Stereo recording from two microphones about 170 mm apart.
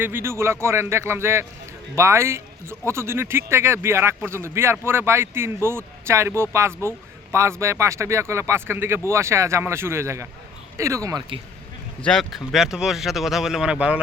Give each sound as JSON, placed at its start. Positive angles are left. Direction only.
{"t": 0.0, "sound": "speech", "side_deg": -15}
{"t": 12.0, "sound": "speech", "side_deg": 0}